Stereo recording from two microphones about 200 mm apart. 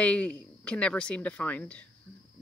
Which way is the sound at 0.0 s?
5° left (ahead or behind).